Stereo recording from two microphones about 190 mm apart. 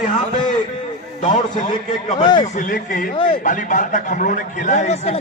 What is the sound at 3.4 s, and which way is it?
A man's voice, 45° left (ahead or behind).